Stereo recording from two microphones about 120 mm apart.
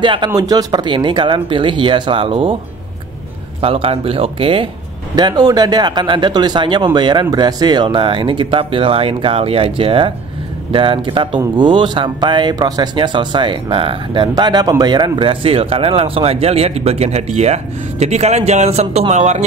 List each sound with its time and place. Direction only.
0.0 s speech: 45° right (ahead or behind)
0.3 s speech: 30° right (ahead or behind); by 2.5 s 50° right (ahead or behind)
3.6 s speech: 50° right (ahead or behind)
5.1 s speech: 35° right (ahead or behind); by 19.4 s 70° right (ahead or behind)